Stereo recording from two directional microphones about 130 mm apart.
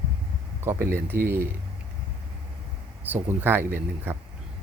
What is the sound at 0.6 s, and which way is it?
Speech, 20° right (ahead or behind).